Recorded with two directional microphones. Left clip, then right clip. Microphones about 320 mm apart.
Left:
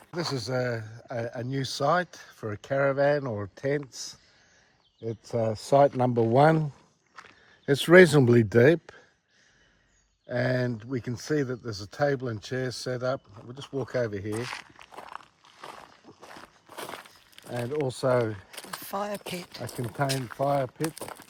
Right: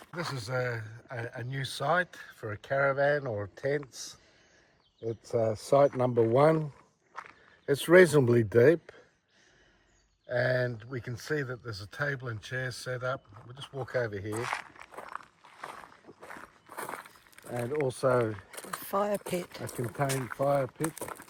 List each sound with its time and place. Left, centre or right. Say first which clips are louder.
0.1 s speech: left 4 dB; centre
7.7 s speech: left 4 dB; left
10.2 s speech: left 1 dB; left
14.4 s speech: right 3 dB; centre
15.0 s a sound: even; centre
17.7 s speech: left 2 dB; left
18.8 s speech: right 3 dB; centre
19.6 s speech: left 6 dB; left
21.0 s crumpling: even; centre